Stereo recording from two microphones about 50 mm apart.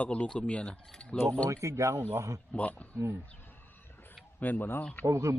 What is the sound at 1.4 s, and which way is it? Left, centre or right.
Speech, right.